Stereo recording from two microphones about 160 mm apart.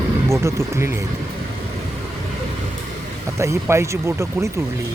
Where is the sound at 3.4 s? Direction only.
15° right (ahead or behind).